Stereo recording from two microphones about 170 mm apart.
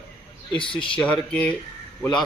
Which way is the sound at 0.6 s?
30° left (ahead or behind).